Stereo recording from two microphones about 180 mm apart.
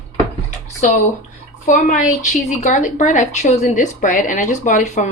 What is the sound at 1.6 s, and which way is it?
A woman's voice, 45° left (ahead or behind).